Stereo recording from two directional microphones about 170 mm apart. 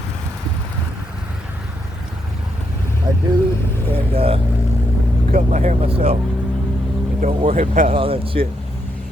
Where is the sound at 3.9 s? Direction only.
35° right (ahead or behind).